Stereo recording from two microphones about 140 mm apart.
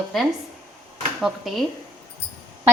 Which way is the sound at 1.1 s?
Centre (ahead or behind).